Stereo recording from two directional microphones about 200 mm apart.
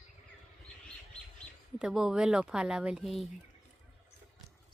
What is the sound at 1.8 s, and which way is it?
Speech, 5° right (ahead or behind).